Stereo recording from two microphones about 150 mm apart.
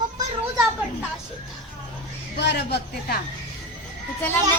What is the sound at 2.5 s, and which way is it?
Speech, 90° left.